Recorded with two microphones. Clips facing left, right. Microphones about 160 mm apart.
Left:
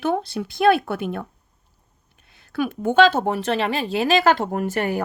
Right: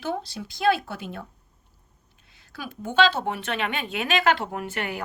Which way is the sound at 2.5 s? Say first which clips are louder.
Left 10 dB; 60° left (ahead or behind).